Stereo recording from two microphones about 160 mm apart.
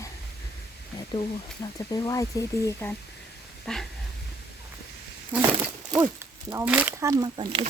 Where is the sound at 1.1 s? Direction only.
25° left (ahead or behind).